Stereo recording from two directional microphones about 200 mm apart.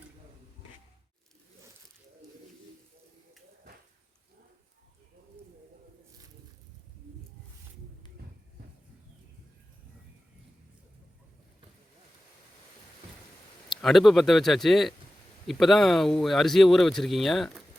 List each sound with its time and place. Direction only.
13.7 s speech: centre (ahead or behind)